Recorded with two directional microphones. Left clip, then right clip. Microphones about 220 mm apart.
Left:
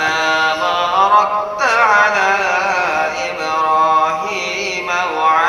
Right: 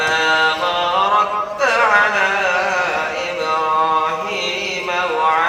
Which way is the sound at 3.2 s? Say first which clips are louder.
Left 1 dB; 20° left (ahead or behind).